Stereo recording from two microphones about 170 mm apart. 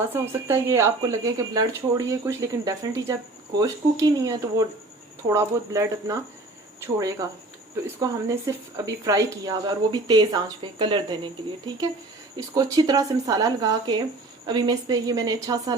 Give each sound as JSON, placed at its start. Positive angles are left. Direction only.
{"t": 0.1, "sound": "speech", "side_deg": -15}